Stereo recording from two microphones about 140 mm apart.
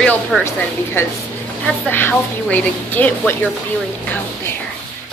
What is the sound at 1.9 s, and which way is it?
A woman's voice, 15° left (ahead or behind).